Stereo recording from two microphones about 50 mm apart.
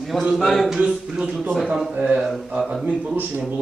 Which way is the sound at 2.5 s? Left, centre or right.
Centre.